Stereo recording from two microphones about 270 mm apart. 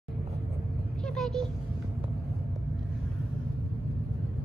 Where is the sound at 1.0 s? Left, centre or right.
Centre.